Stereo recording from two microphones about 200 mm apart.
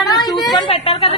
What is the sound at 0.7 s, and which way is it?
Speech, 30° left (ahead or behind).